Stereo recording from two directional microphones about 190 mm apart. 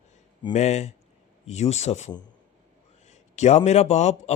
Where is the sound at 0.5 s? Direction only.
35° left (ahead or behind).